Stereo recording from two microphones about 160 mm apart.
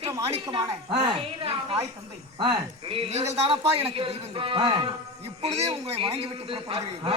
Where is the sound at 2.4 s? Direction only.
35° right (ahead or behind).